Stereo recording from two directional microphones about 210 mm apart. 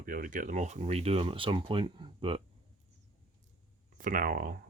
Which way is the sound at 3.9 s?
40° right (ahead or behind).